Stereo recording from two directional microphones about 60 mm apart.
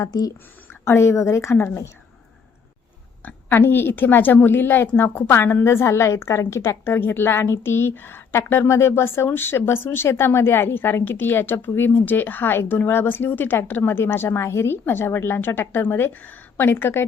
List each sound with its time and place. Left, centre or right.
0.0 s a woman's voice: left
0.7 s a woman's voice: left
3.2 s a woman's voice: left